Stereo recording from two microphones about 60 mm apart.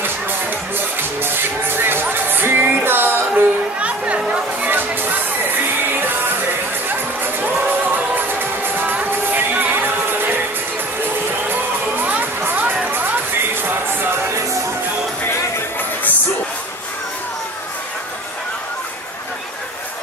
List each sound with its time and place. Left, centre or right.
0.7 s music: right
3.8 s music: right
4.6 s music: right
7.3 s music: right
12.0 s music: right